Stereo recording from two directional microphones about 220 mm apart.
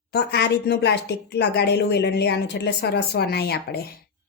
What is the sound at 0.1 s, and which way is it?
Speech, 50° left (ahead or behind).